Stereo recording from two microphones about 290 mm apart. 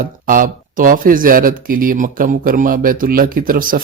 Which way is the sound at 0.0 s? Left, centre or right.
Right.